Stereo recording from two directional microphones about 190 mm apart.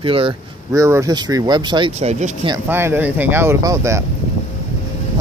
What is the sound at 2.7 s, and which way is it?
Speech, 10° right (ahead or behind).